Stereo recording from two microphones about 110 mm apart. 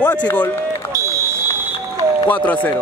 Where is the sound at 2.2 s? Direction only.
15° left (ahead or behind).